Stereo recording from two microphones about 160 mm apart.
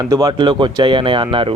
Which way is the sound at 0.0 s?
20° right (ahead or behind).